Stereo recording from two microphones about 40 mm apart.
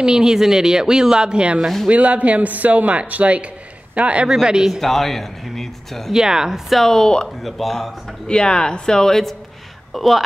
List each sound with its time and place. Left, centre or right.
0.0 s speech: centre
4.3 s speech: centre
4.8 s speech: centre
6.1 s speech: centre
6.7 s speech: centre
7.0 s speech: left
7.4 s speech: centre
8.3 s speech: left
9.9 s speech: centre